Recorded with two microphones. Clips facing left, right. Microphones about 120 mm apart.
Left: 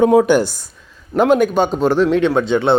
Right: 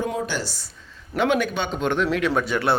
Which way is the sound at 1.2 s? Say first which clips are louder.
Left 9 dB; 45° left (ahead or behind).